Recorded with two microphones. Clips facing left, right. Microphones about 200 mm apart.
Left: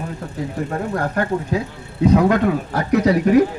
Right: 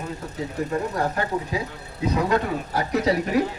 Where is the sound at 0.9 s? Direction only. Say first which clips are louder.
Left 4 dB; 55° left (ahead or behind).